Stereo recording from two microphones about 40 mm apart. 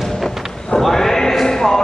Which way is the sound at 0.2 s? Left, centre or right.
Centre.